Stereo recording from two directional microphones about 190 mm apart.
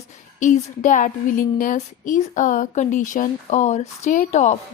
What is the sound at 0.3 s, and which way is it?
Speech, 40° left (ahead or behind).